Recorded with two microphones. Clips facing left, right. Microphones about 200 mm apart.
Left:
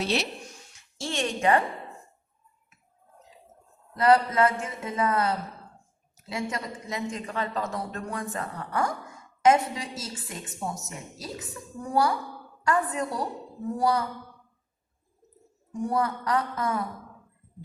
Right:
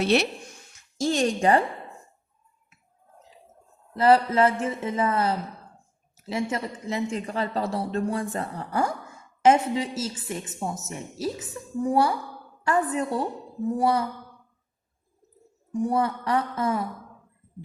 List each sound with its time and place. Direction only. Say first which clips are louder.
0.0 s speech: right 6 dB; 60° right (ahead or behind)
0.9 s a woman's voice: right 7 dB; 40° right (ahead or behind)
3.9 s speech: right 2 dB; 30° right (ahead or behind)
15.9 s speech: right 1 dB; 25° right (ahead or behind)